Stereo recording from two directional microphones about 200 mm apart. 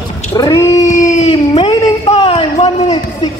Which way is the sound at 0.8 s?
40° left (ahead or behind).